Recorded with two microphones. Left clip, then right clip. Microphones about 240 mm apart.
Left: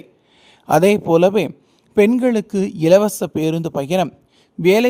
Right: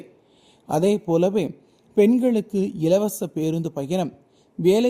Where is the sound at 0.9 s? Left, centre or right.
Left.